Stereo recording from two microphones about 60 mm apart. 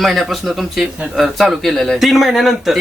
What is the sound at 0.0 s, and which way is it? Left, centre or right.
A man's voice, centre.